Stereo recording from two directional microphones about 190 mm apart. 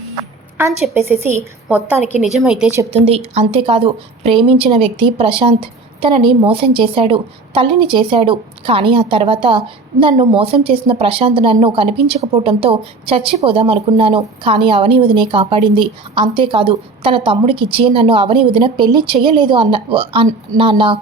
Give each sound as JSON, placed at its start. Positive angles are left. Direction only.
{"t": 1.6, "sound": "a woman's voice", "side_deg": -5}
{"t": 2.9, "sound": "a woman's voice", "side_deg": -30}